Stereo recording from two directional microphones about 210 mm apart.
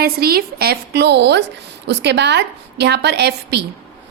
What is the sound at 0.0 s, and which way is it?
A woman's voice, 45° right (ahead or behind).